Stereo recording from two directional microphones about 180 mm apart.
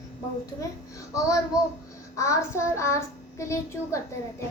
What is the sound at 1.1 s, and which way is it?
Child singing, 20° left (ahead or behind).